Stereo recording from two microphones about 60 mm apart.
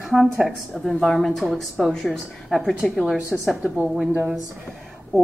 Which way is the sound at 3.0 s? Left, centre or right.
Centre.